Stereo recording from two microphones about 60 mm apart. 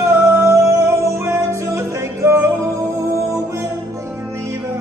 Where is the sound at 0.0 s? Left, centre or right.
Right.